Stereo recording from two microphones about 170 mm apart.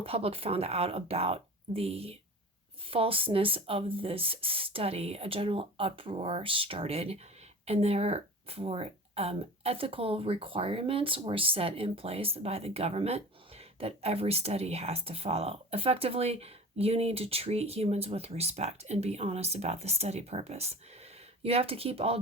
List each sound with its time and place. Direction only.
0.0 s speech: 35° right (ahead or behind)